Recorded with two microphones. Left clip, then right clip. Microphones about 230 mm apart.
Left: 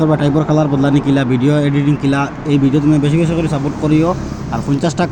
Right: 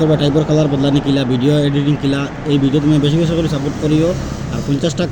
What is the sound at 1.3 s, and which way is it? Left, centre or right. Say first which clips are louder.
Speech: even; left.